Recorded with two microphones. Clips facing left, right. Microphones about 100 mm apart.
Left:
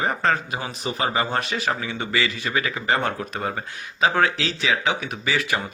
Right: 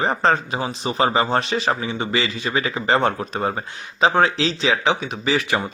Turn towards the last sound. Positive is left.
turn(degrees=-20)  # may be behind; listen again after turning